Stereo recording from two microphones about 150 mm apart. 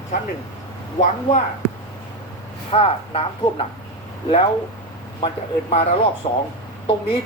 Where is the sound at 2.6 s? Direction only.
40° left (ahead or behind).